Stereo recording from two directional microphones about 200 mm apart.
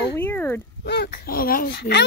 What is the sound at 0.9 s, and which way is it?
Speech, 50° left (ahead or behind).